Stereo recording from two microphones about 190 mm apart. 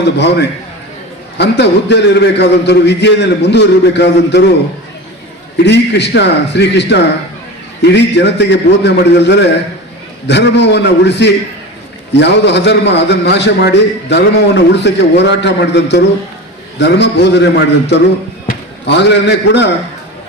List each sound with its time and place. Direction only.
0.2 s a man's voice: 65° left (ahead or behind)
5.6 s a man's voice: 65° left (ahead or behind)